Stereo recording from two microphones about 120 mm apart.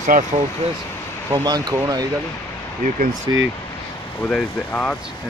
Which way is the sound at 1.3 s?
35° right (ahead or behind).